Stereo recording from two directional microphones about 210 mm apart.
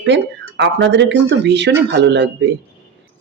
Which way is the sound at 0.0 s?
55° right (ahead or behind).